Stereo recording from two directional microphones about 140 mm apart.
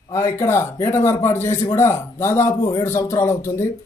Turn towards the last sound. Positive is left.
turn(degrees=20)  # may be behind; listen again after turning